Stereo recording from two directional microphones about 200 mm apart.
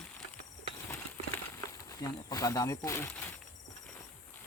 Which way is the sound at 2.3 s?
15° left (ahead or behind).